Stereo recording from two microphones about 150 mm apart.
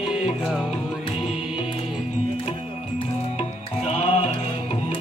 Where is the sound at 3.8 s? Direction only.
45° left (ahead or behind).